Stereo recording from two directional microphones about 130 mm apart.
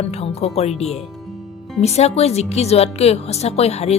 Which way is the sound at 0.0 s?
55° left (ahead or behind).